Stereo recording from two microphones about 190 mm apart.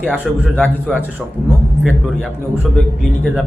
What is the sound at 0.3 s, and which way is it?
Speech, centre (ahead or behind).